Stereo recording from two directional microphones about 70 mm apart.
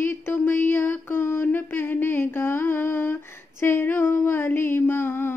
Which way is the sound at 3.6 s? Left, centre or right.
Left.